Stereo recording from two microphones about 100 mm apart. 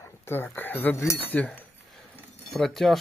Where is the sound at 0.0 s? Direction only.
20° left (ahead or behind).